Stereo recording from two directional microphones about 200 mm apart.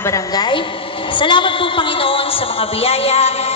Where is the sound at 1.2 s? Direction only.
25° left (ahead or behind).